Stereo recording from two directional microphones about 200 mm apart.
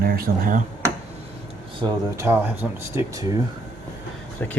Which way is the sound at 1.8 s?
25° right (ahead or behind).